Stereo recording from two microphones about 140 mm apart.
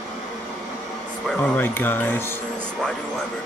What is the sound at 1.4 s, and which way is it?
Speech, 15° left (ahead or behind).